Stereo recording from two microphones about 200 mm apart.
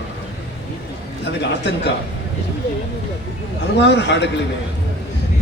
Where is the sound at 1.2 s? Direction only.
60° left (ahead or behind).